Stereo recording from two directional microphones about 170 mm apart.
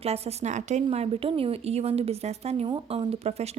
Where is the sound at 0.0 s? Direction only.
40° right (ahead or behind).